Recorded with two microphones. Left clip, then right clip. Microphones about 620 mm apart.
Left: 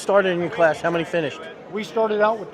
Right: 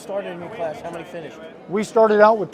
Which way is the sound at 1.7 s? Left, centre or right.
Right.